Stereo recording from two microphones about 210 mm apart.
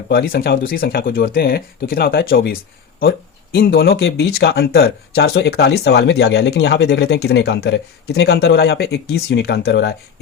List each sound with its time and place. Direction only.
0.1 s speech: 45° left (ahead or behind)